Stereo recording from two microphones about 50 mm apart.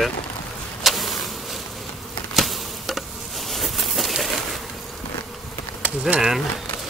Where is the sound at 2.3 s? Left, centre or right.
Centre.